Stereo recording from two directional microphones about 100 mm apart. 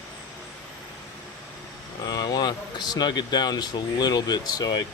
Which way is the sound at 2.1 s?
40° left (ahead or behind).